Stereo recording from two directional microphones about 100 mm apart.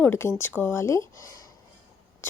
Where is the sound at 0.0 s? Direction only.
25° left (ahead or behind).